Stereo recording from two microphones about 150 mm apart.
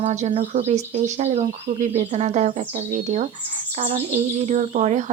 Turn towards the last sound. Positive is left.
turn(degrees=-50)  # may be behind; listen again after turning